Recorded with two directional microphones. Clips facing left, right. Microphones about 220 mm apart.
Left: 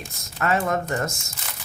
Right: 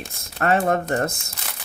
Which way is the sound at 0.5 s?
35° right (ahead or behind).